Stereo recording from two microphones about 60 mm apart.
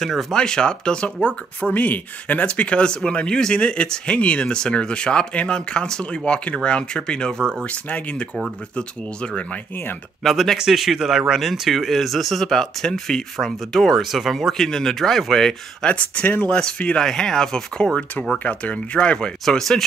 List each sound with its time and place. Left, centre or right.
0.0 s speech: centre
0.4 s speech: centre
7.6 s speech: left
10.2 s speech: centre
15.9 s speech: left; by 19.8 s centre